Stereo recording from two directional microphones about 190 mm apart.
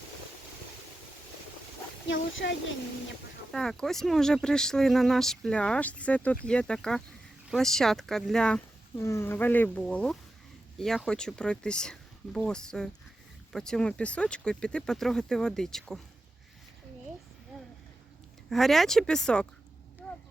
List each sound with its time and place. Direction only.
2.4 s speech: 65° left (ahead or behind)
3.5 s speech: centre (ahead or behind)
18.5 s speech: centre (ahead or behind)